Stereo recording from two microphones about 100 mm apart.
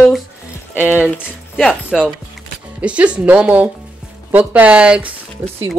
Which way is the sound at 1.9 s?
Centre (ahead or behind).